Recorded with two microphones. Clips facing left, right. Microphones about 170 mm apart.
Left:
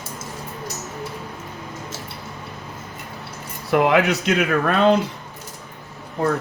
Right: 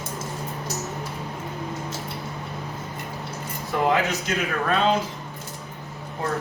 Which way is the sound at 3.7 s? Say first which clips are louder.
Left 5 dB; 70° left (ahead or behind).